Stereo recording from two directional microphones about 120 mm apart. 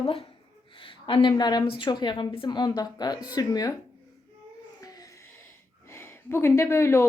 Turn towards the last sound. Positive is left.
turn(degrees=20)  # may be behind; listen again after turning